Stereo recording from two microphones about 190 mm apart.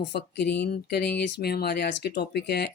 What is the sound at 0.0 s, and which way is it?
Speech, 65° left (ahead or behind).